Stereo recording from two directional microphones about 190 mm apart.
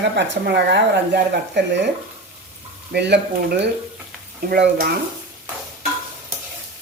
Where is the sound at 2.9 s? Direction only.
60° right (ahead or behind).